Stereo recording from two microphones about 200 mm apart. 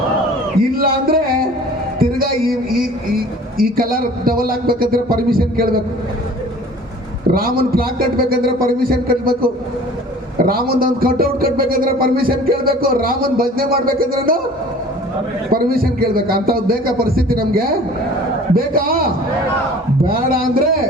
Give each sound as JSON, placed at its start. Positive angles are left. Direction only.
{"t": 0.6, "sound": "a sound", "side_deg": -45}
{"t": 2.0, "sound": "a man's voice", "side_deg": -45}
{"t": 7.3, "sound": "speech", "side_deg": -50}
{"t": 15.5, "sound": "speech", "side_deg": -50}